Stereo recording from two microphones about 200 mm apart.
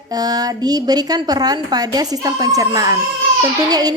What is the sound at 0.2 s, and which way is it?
A woman's voice, 20° right (ahead or behind).